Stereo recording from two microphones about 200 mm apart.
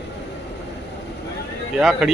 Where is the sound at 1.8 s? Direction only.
Centre (ahead or behind).